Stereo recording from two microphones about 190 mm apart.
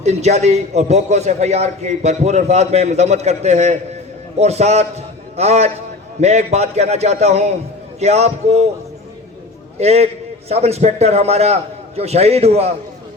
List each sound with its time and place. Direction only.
0.0 s a man's voice: 35° right (ahead or behind)
9.7 s a man's voice: 35° right (ahead or behind)